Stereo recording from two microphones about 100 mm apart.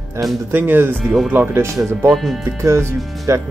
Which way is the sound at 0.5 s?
20° right (ahead or behind).